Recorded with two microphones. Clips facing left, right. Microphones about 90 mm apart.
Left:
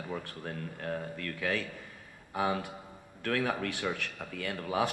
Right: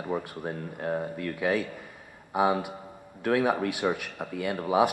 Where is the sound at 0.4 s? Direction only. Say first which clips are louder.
Right 6 dB; 20° right (ahead or behind).